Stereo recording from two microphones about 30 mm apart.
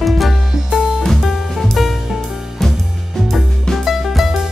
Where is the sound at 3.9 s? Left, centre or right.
Centre.